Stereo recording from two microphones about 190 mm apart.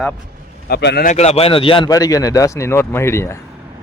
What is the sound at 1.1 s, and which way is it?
A man's voice, 35° left (ahead or behind).